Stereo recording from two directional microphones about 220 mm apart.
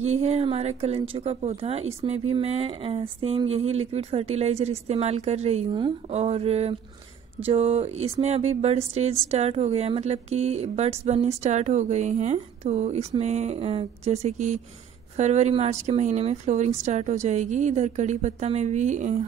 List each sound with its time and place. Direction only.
0.0 s a woman's voice: 30° right (ahead or behind)